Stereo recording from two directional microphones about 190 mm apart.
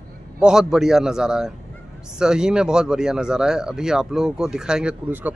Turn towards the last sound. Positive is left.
turn(degrees=-10)  # may be behind; listen again after turning